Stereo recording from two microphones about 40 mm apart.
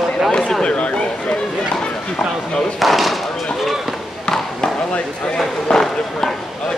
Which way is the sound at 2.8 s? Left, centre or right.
Centre.